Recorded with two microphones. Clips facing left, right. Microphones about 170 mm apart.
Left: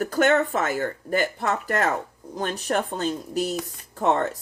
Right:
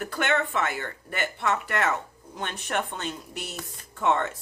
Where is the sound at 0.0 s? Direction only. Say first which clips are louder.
Left 7 dB; 40° left (ahead or behind).